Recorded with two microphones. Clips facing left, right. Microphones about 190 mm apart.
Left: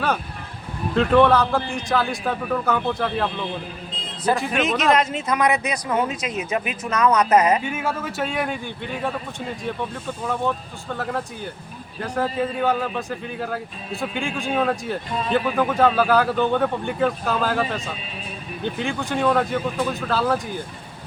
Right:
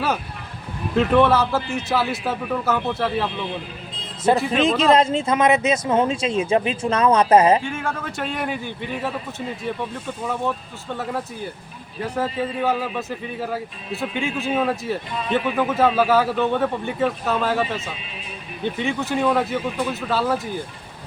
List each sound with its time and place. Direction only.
0.9 s a man's voice: 5° right (ahead or behind)
4.5 s speech: 30° right (ahead or behind)
7.6 s a man's voice: 5° left (ahead or behind)
10.9 s a man's voice: 5° right (ahead or behind)